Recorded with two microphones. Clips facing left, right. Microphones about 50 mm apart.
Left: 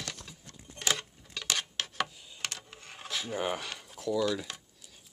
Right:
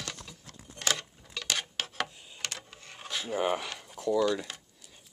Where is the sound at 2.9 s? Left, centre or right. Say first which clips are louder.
Right 3 dB; centre.